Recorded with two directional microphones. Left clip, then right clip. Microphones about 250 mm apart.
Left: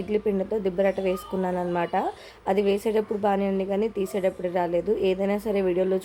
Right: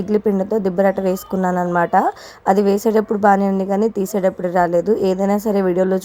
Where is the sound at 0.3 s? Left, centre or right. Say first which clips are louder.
Right 7 dB; right.